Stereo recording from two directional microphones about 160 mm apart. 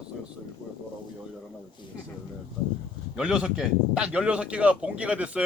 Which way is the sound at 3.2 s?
5° right (ahead or behind).